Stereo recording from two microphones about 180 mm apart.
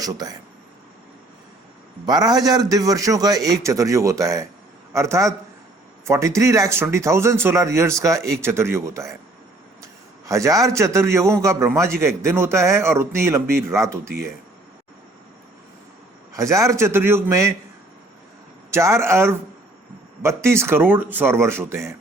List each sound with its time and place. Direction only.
0.0 s a man's voice: 20° right (ahead or behind)
2.0 s a man's voice: 20° right (ahead or behind)
16.3 s a man's voice: 15° right (ahead or behind)
18.7 s a man's voice: 15° right (ahead or behind)